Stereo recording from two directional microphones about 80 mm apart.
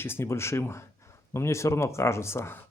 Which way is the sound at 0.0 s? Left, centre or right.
Left.